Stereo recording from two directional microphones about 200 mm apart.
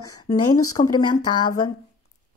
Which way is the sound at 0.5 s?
90° left.